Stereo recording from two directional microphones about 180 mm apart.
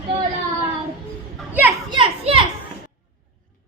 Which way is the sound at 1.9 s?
30° right (ahead or behind).